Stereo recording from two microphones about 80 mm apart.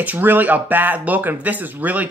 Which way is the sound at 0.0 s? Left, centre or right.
Right.